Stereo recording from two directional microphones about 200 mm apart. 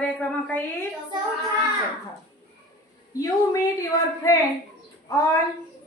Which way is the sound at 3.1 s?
15° left (ahead or behind).